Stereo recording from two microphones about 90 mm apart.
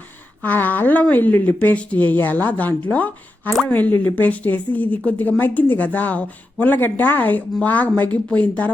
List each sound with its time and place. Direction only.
0.4 s a woman's voice: 20° left (ahead or behind)